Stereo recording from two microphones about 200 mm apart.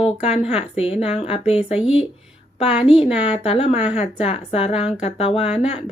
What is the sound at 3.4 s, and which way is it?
Speech, 25° left (ahead or behind).